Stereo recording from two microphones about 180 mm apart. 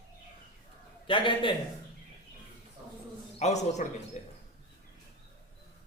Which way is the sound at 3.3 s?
40° left (ahead or behind).